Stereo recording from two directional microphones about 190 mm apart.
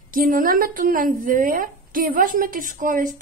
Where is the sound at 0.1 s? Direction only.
45° right (ahead or behind).